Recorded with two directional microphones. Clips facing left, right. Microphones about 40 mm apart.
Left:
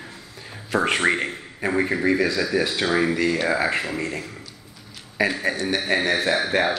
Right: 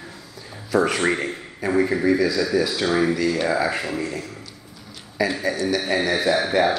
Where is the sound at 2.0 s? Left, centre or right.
Left.